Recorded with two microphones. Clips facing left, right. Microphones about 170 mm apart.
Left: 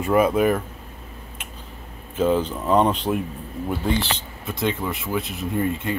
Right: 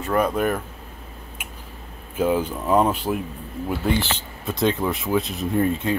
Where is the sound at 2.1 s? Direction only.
10° right (ahead or behind).